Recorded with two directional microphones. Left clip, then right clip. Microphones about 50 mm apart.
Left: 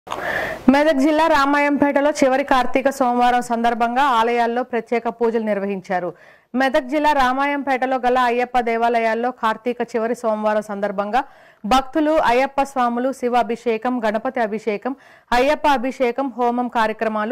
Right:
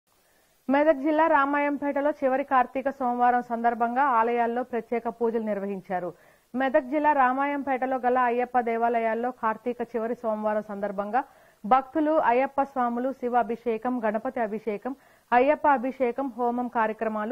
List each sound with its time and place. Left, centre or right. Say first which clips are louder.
0.7 s speech: left 6 dB; left
2.7 s speech: left 10 dB; left
3.7 s speech: left 6 dB; left
13.9 s speech: left 7 dB; left